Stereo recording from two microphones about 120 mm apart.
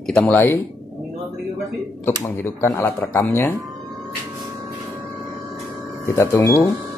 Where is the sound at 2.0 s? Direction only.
20° left (ahead or behind).